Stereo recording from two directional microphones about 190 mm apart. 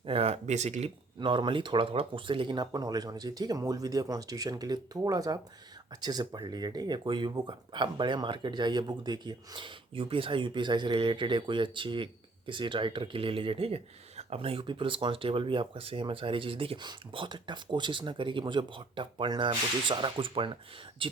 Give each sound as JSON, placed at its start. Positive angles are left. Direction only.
{"t": 0.0, "sound": "speech", "side_deg": -30}